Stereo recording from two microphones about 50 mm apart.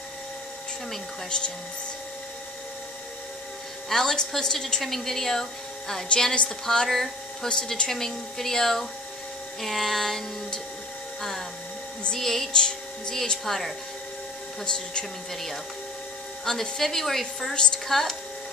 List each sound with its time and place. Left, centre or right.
3.9 s a woman's voice: centre
6.0 s a woman's voice: centre
11.1 s music: centre
12.2 s a woman's voice: centre
14.6 s a woman's voice: centre
16.4 s a woman's voice: centre